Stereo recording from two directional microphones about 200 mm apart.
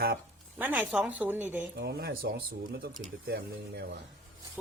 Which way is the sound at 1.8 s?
55° right (ahead or behind).